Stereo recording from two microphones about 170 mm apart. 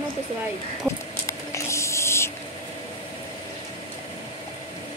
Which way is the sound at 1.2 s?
15° left (ahead or behind).